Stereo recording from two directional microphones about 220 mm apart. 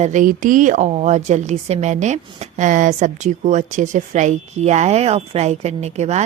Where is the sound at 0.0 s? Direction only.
35° right (ahead or behind).